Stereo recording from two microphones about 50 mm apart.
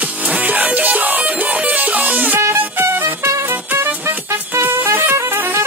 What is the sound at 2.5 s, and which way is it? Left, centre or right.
Music, right.